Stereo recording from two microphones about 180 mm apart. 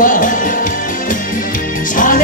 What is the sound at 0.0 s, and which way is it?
Music, 45° left (ahead or behind).